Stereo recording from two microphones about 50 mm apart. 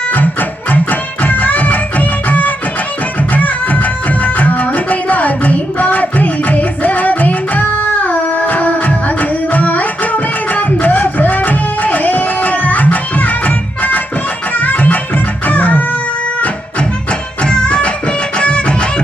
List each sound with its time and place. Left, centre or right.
0.1 s music: left
17.4 s music: centre